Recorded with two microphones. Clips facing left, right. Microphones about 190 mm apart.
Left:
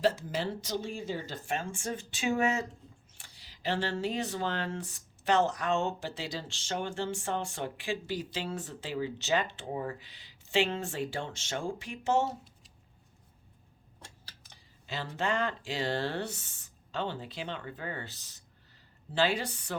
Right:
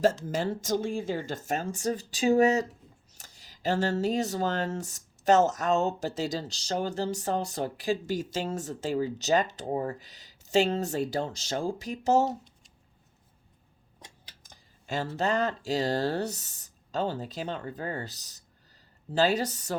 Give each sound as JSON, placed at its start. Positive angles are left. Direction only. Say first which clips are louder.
{"t": 0.3, "sound": "speech", "louder": "right 5 dB", "side_deg": -45}
{"t": 14.4, "sound": "speech", "louder": "right 8 dB", "side_deg": -45}